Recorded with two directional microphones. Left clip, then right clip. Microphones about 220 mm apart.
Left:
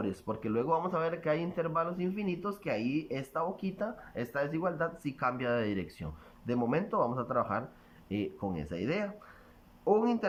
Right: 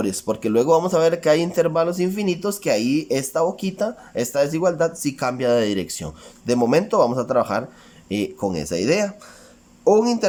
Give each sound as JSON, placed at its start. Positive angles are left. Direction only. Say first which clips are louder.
{"t": 0.0, "sound": "speech", "louder": "right 13 dB", "side_deg": -20}
{"t": 8.4, "sound": "speech", "louder": "right 14 dB", "side_deg": -35}
{"t": 8.6, "sound": "a man's voice", "louder": "right 15 dB", "side_deg": -20}